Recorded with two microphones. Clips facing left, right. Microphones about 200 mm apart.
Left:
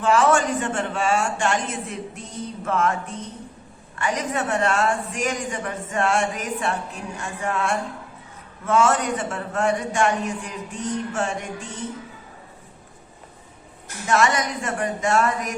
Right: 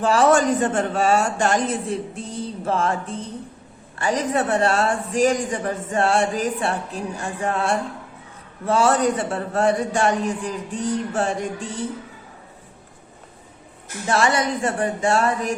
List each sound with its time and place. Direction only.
0.0 s a man's voice: 35° right (ahead or behind)
14.1 s a man's voice: 30° right (ahead or behind)